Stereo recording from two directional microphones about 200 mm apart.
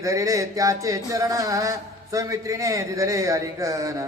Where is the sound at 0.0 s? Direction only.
15° right (ahead or behind).